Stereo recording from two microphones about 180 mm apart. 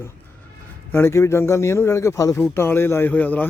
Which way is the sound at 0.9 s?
15° left (ahead or behind).